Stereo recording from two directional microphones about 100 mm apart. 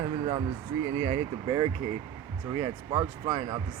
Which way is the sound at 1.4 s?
50° right (ahead or behind).